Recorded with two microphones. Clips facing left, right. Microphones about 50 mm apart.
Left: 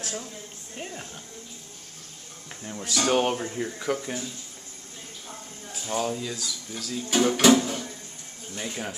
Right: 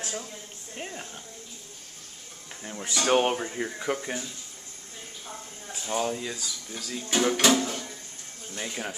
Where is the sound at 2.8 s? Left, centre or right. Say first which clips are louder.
Even; centre.